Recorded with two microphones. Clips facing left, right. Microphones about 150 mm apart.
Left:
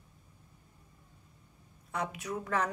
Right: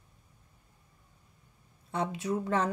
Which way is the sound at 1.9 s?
30° right (ahead or behind).